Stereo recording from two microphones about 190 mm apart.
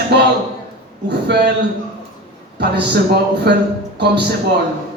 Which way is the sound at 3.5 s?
60° right (ahead or behind).